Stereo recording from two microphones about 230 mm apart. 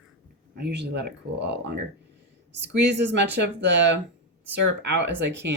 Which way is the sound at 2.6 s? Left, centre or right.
Right.